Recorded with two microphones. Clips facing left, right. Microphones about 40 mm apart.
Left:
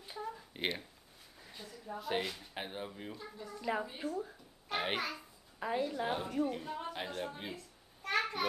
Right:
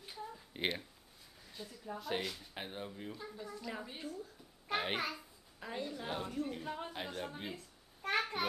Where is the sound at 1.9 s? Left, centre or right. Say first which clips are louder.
Left 3 dB; centre.